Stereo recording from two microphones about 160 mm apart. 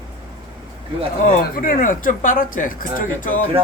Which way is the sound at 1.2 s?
55° left (ahead or behind).